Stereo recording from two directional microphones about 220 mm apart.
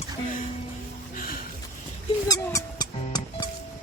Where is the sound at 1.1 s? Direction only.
40° left (ahead or behind).